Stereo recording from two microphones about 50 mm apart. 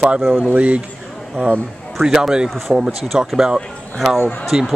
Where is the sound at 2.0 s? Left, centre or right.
Centre.